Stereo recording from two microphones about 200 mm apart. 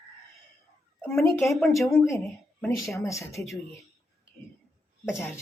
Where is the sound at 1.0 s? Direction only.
15° left (ahead or behind).